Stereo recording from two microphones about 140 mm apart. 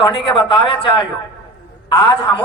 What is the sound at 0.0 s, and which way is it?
A woman's voice, 35° left (ahead or behind).